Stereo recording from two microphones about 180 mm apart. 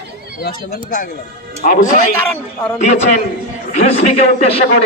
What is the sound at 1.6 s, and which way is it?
A man's voice, 50° left (ahead or behind).